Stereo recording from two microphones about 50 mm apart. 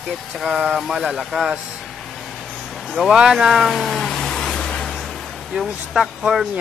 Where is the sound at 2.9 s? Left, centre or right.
Centre.